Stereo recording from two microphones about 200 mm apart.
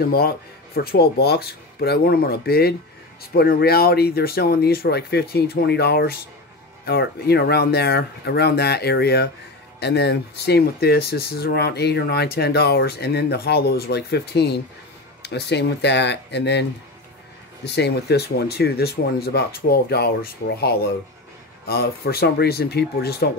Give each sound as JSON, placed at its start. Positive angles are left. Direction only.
{"t": 0.0, "sound": "speech", "side_deg": 50}
{"t": 17.6, "sound": "speech", "side_deg": 55}